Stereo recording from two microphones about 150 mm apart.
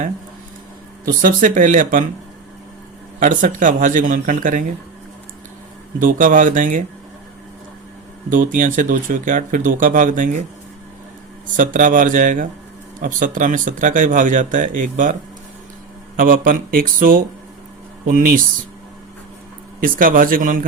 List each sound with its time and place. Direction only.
1.0 s speech: 65° right (ahead or behind)
3.2 s speech: 60° right (ahead or behind)
6.0 s speech: 65° right (ahead or behind)
8.3 s speech: 60° right (ahead or behind)
11.5 s speech: 60° right (ahead or behind)
16.1 s speech: 70° right (ahead or behind)
19.8 s speech: 70° right (ahead or behind)